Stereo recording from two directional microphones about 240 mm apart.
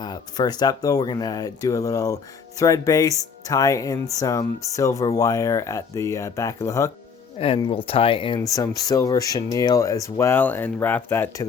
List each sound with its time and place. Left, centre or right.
0.0 s speech: centre